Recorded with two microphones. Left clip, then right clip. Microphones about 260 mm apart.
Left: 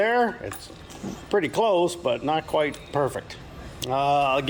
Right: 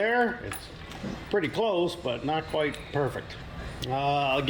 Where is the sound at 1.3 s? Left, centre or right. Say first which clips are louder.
Left 5 dB; centre.